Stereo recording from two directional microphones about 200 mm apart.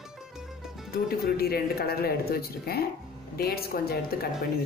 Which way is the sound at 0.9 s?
50° left (ahead or behind).